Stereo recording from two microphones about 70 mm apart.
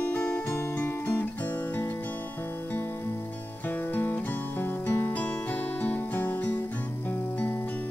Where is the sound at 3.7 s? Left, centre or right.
Left.